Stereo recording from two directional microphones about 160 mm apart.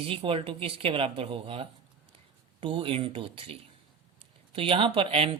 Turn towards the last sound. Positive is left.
turn(degrees=-35)  # may be behind; listen again after turning